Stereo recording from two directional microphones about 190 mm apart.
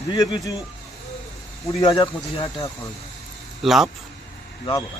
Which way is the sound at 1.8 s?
25° left (ahead or behind).